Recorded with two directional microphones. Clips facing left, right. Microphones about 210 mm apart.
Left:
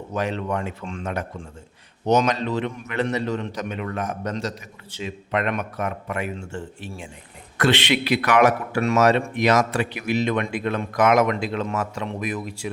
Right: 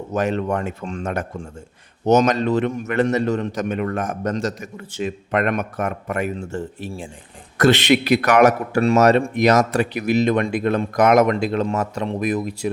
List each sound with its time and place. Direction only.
0.1 s a man's voice: 45° right (ahead or behind)